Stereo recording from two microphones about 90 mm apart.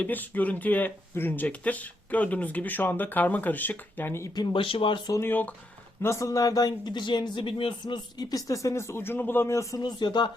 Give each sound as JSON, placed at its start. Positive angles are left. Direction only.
{"t": 0.0, "sound": "speech", "side_deg": 20}
{"t": 4.5, "sound": "speech", "side_deg": 75}
{"t": 5.2, "sound": "speech", "side_deg": 20}
{"t": 6.0, "sound": "speech", "side_deg": 30}
{"t": 8.2, "sound": "speech", "side_deg": 45}
{"t": 9.7, "sound": "speech", "side_deg": 55}